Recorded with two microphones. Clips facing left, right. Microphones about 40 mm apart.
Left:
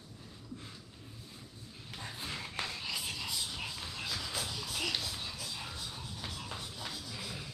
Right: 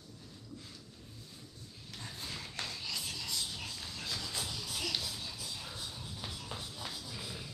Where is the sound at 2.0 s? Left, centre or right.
Centre.